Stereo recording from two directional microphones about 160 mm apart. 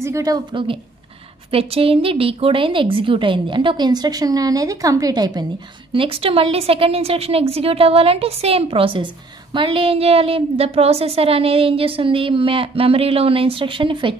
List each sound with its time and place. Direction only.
0.0 s a woman's voice: 20° right (ahead or behind)
5.9 s a woman's voice: 35° right (ahead or behind)